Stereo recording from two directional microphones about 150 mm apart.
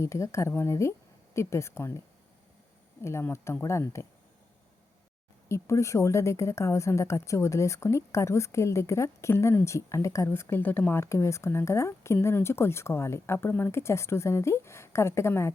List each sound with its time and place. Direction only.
0.0 s speech: 20° left (ahead or behind)
3.0 s speech: 20° left (ahead or behind)
5.5 s speech: 20° left (ahead or behind)